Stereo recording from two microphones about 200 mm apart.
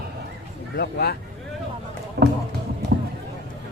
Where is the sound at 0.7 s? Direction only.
50° left (ahead or behind).